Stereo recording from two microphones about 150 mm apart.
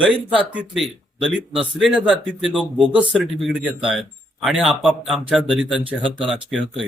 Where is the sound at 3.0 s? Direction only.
5° right (ahead or behind).